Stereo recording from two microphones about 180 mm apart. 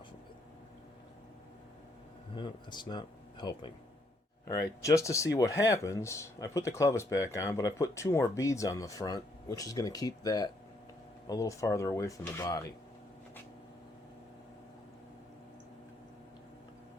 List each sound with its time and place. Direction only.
2.3 s speech: 25° left (ahead or behind)
4.8 s speech: 15° left (ahead or behind)